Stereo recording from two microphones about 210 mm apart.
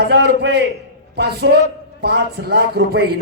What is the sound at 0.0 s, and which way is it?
A man's voice, 50° right (ahead or behind).